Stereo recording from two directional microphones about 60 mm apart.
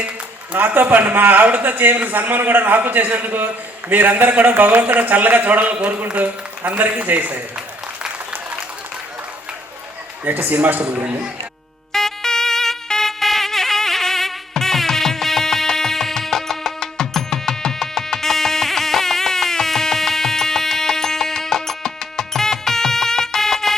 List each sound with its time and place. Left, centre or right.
0.5 s a man's voice: right
10.2 s a man's voice: right
11.9 s music: centre